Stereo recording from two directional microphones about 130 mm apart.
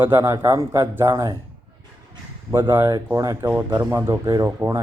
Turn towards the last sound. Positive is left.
turn(degrees=-25)  # may be behind; listen again after turning